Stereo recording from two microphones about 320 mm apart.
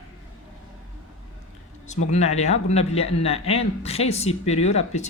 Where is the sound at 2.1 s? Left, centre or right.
Centre.